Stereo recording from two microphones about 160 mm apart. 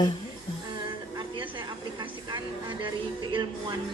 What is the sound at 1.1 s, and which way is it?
Music, 30° right (ahead or behind).